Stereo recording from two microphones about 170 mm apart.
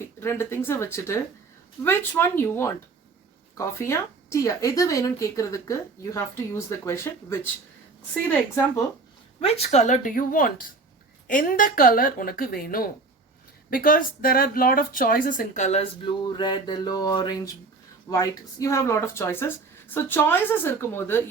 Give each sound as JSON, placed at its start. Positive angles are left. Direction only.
{"t": 0.0, "sound": "speech", "side_deg": 15}
{"t": 9.4, "sound": "a woman's voice", "side_deg": 35}